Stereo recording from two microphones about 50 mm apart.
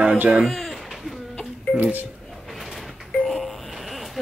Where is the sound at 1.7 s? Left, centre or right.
Right.